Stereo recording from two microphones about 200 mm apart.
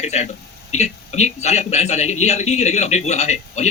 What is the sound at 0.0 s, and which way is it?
A man's voice, 35° left (ahead or behind).